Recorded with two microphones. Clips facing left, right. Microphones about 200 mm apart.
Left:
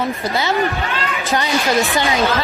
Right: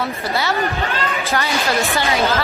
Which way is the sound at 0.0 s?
20° left (ahead or behind).